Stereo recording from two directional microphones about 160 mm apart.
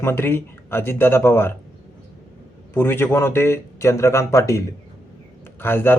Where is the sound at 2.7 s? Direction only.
15° left (ahead or behind).